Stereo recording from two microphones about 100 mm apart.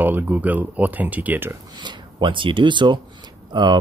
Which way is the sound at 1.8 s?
55° right (ahead or behind).